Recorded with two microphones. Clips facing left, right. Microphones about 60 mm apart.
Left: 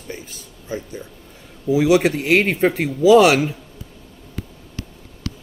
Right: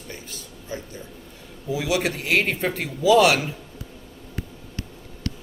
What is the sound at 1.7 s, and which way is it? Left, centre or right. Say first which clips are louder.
Speech: left 9 dB; left.